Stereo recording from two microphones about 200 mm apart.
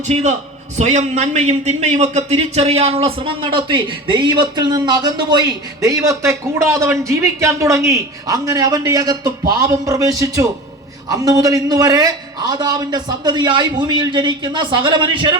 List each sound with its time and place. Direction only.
0.1 s a man's voice: 35° right (ahead or behind)